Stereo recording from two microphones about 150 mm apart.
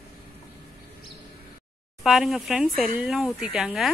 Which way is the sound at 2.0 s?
Centre (ahead or behind).